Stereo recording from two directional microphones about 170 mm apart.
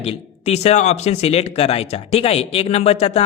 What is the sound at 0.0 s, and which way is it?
Speech, 35° left (ahead or behind).